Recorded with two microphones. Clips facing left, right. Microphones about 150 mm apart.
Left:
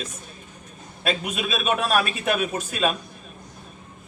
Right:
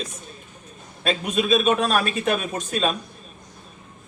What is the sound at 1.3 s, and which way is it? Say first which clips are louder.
A man's voice: right 5 dB; 35° right (ahead or behind).